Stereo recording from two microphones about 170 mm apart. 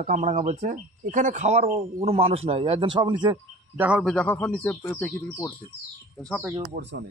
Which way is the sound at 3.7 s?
10° right (ahead or behind).